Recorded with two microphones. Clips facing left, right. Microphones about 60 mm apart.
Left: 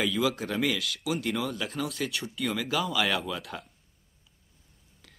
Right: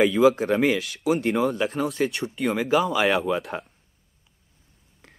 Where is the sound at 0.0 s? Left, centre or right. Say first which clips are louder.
Right 10 dB; right.